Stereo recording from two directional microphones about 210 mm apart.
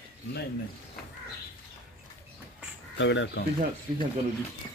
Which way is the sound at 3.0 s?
60° left (ahead or behind).